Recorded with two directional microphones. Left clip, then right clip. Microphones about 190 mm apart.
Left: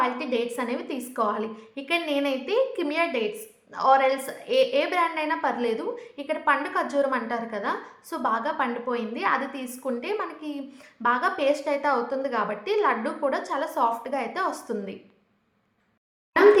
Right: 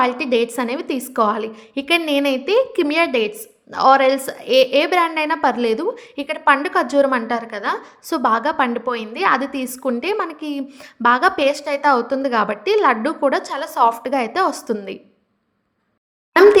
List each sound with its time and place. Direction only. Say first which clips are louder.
0.0 s a woman's voice: right 8 dB; 45° right (ahead or behind)